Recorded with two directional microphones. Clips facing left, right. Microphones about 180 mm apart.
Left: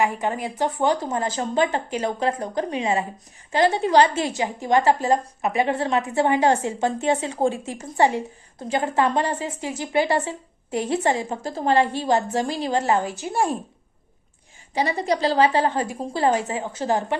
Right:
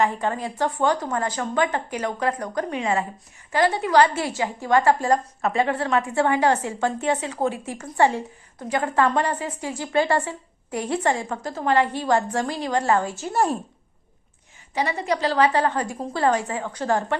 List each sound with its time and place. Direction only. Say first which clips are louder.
0.0 s a woman's voice: even; 15° left (ahead or behind)
14.7 s a woman's voice: left 2 dB; 35° left (ahead or behind)